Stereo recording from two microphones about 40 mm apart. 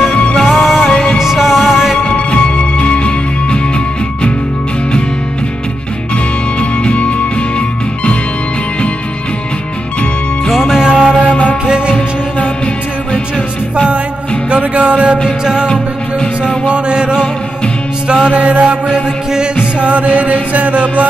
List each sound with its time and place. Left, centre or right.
0.1 s music: left
0.5 s music: centre
2.0 s music: left
6.6 s music: left
10.5 s music: centre
10.9 s music: right
14.5 s music: right
15.2 s music: centre
16.4 s music: right
18.9 s music: centre
19.8 s music: right